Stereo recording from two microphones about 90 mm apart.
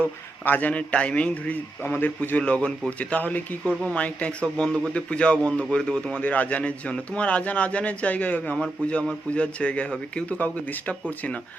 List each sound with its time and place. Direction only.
0.0 s a man's voice: 20° left (ahead or behind)